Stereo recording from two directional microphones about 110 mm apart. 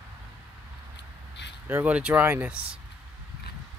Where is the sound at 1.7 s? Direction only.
15° right (ahead or behind).